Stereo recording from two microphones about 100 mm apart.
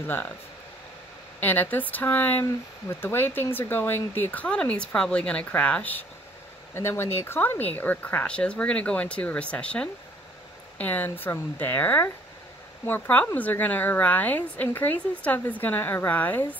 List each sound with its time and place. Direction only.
0.0 s speech: 20° left (ahead or behind)
1.4 s a woman's voice: 20° left (ahead or behind)